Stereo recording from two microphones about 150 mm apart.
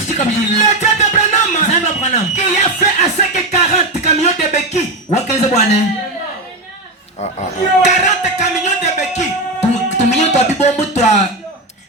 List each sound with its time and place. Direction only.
0.6 s music: 50° left (ahead or behind)
7.2 s a man's voice: 50° left (ahead or behind)